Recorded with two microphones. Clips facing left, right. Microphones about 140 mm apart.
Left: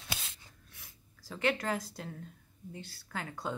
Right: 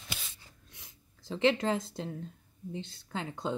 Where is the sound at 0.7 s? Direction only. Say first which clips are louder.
Right 1 dB; 20° right (ahead or behind).